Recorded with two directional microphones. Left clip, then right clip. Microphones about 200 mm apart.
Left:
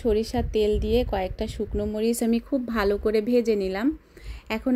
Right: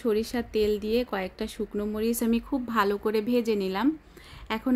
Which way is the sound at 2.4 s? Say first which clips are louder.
Even; 15° left (ahead or behind).